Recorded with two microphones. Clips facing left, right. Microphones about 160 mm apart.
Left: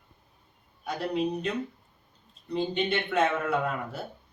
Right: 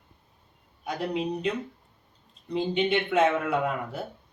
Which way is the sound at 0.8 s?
15° right (ahead or behind).